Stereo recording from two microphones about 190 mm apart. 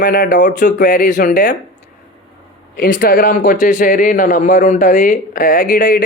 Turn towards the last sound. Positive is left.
turn(degrees=45)  # may be behind; listen again after turning